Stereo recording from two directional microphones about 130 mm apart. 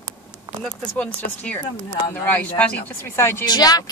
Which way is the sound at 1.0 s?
10° left (ahead or behind).